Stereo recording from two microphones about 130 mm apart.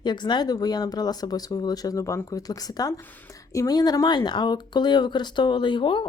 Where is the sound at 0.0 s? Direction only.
35° left (ahead or behind).